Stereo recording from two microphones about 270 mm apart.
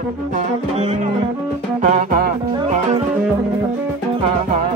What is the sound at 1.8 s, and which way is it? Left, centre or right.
Music, right.